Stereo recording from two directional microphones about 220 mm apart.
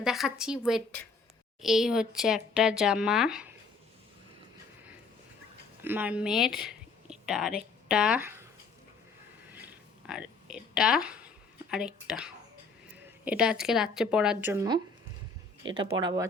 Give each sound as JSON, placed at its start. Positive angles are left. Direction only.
{"t": 0.0, "sound": "speech", "side_deg": 0}
{"t": 5.8, "sound": "speech", "side_deg": -10}
{"t": 10.1, "sound": "speech", "side_deg": -5}
{"t": 16.0, "sound": "speech", "side_deg": -15}